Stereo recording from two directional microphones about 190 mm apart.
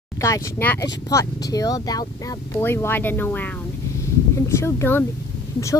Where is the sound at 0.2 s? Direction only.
15° left (ahead or behind).